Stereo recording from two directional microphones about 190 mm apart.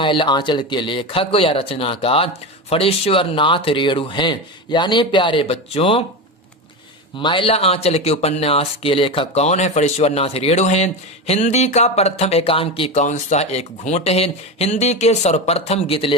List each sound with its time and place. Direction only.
0.0 s speech: 25° left (ahead or behind)
7.2 s speech: 25° left (ahead or behind)